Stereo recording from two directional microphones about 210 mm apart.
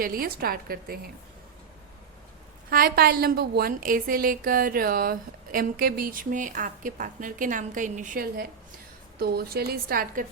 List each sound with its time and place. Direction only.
0.0 s a woman's voice: 45° right (ahead or behind)
2.6 s a woman's voice: 45° right (ahead or behind)